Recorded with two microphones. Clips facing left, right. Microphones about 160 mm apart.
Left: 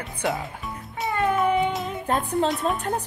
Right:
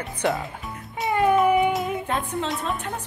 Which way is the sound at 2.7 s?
45° left (ahead or behind).